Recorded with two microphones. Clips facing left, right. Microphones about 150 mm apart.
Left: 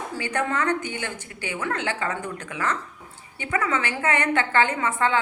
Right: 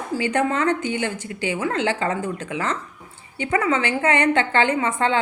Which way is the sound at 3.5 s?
30° right (ahead or behind).